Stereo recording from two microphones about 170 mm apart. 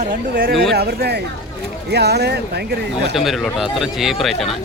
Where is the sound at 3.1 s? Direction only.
Centre (ahead or behind).